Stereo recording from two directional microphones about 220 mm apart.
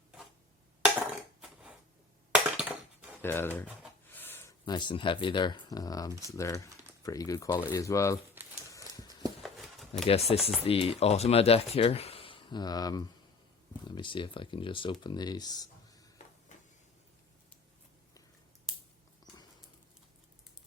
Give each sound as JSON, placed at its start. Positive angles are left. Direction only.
{"t": 2.3, "sound": "crushing", "side_deg": -5}
{"t": 3.2, "sound": "speech", "side_deg": 10}
{"t": 9.4, "sound": "a sound", "side_deg": 0}
{"t": 10.1, "sound": "speech", "side_deg": 25}